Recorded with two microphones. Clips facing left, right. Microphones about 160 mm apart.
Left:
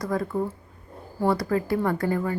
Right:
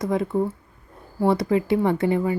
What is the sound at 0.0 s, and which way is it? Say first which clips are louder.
Speech: right 4 dB; 20° right (ahead or behind).